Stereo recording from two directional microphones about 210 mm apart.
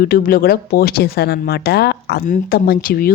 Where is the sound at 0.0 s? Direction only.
45° left (ahead or behind).